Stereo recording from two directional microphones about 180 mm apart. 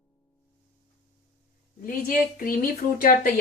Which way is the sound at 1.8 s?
50° left (ahead or behind).